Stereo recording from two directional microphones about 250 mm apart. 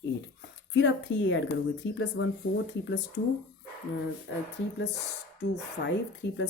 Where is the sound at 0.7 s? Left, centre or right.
Left.